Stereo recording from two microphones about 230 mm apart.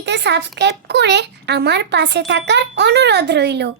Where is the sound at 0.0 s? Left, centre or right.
Right.